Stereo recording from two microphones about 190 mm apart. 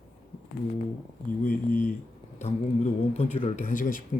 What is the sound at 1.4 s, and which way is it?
Speech, 40° left (ahead or behind).